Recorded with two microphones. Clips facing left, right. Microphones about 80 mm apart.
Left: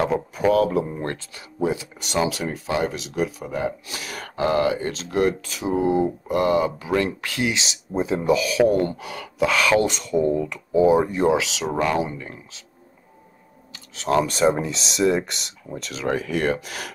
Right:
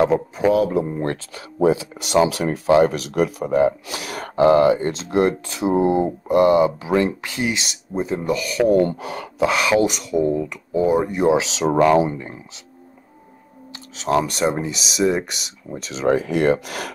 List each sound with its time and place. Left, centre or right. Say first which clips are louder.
0.0 s speech: right 4 dB; centre
2.1 s speech: right 6 dB; right
2.9 s speech: right 5 dB; right; by 8.6 s centre
8.7 s speech: right 5 dB; right
9.5 s speech: right 1 dB; centre
11.2 s speech: right 3 dB; right
14.0 s speech: even; centre
16.0 s speech: right 5 dB; right
16.5 s speech: right 5 dB; right